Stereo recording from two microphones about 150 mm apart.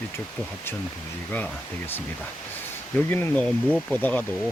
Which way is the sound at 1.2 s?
10° left (ahead or behind).